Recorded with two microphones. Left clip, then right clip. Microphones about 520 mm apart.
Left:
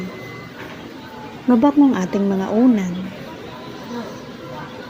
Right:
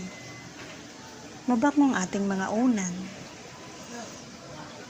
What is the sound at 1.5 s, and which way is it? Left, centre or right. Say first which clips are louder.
Speech: left 9 dB; right.